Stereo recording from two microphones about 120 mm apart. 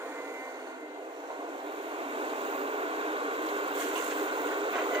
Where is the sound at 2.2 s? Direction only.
50° right (ahead or behind).